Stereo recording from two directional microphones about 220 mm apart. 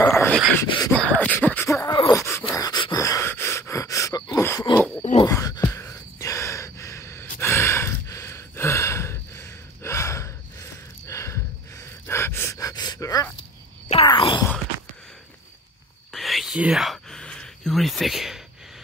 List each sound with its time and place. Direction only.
0.0 s a sound: 5° left (ahead or behind)
5.0 s wail: 25° left (ahead or behind)
5.3 s a sound: 15° left (ahead or behind)
11.1 s snort: 15° left (ahead or behind)
12.1 s gasp: 10° left (ahead or behind)
13.8 s groan: 25° left (ahead or behind)
16.1 s whispering: centre (ahead or behind)